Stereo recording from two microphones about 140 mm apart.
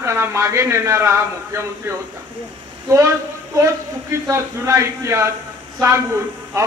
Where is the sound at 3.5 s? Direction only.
20° right (ahead or behind).